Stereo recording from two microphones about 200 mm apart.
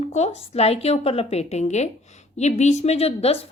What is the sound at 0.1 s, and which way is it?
A woman's voice, 35° left (ahead or behind).